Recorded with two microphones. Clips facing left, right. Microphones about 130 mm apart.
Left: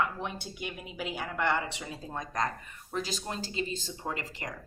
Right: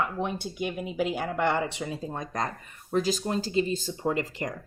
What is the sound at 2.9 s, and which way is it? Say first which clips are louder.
Speech: right 8 dB; 40° right (ahead or behind).